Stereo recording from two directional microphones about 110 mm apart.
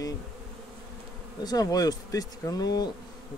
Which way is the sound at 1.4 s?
35° left (ahead or behind).